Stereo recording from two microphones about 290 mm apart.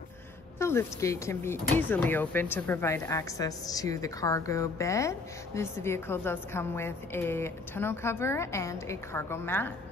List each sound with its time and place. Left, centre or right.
0.6 s speech: centre